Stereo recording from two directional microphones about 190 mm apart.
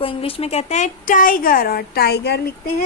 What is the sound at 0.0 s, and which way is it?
A woman's voice, 30° left (ahead or behind).